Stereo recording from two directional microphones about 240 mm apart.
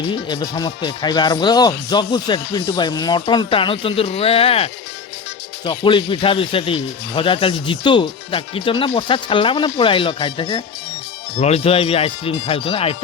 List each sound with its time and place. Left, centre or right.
0.1 s speech: centre